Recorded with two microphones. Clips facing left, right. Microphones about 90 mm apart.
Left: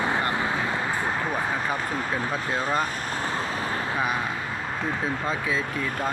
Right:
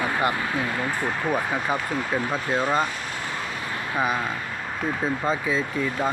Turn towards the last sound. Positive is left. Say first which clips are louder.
# right 3 dB
turn(degrees=0)  # may be behind; listen again after turning